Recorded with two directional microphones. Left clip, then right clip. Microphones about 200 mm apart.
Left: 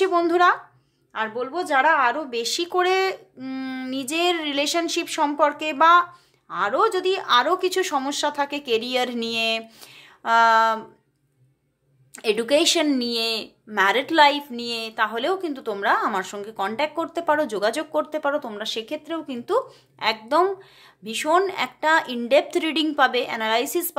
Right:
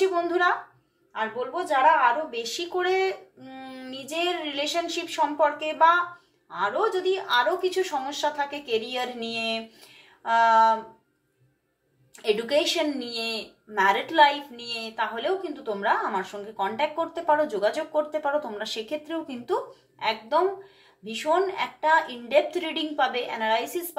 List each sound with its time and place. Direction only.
0.0 s speech: 55° left (ahead or behind)
12.2 s speech: 50° left (ahead or behind); by 19.6 s 35° left (ahead or behind)
20.0 s speech: 50° left (ahead or behind)